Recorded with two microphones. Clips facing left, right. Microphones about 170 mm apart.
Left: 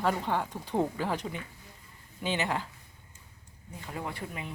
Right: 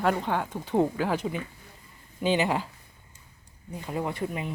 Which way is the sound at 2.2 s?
15° right (ahead or behind).